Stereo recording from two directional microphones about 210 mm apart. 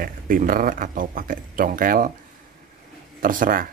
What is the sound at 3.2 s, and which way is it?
Speech, 40° right (ahead or behind).